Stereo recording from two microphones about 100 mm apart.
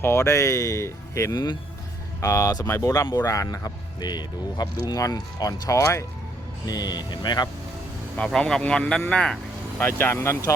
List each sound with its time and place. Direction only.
0.0 s speech: 25° left (ahead or behind)
2.9 s speech: 40° left (ahead or behind)
6.7 s speech: 40° left (ahead or behind)
8.1 s speech: 10° left (ahead or behind)
9.7 s speech: 20° left (ahead or behind)